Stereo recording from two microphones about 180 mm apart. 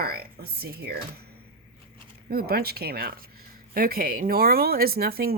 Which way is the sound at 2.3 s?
60° right (ahead or behind).